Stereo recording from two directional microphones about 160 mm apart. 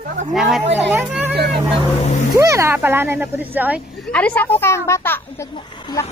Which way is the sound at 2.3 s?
20° right (ahead or behind).